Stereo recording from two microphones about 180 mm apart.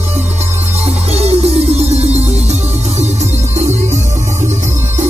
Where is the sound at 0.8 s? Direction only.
35° right (ahead or behind).